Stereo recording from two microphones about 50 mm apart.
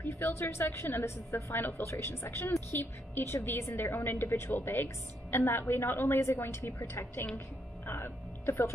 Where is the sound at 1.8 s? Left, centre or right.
Left.